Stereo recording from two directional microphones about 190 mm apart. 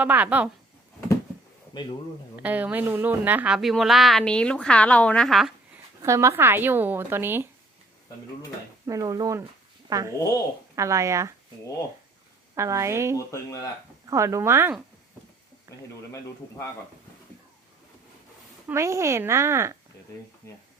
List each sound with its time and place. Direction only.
0.0 s a woman's voice: 10° right (ahead or behind)
2.3 s a woman's voice: 10° right (ahead or behind)
6.0 s a woman's voice: 15° right (ahead or behind)
8.9 s a woman's voice: 20° right (ahead or behind)
12.5 s a woman's voice: 15° right (ahead or behind)
13.1 s speech: 15° left (ahead or behind)
14.1 s a woman's voice: 15° right (ahead or behind)
15.7 s a sound: 15° left (ahead or behind)
18.7 s a woman's voice: 15° right (ahead or behind)